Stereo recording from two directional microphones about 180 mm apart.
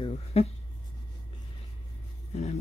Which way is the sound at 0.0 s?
35° left (ahead or behind).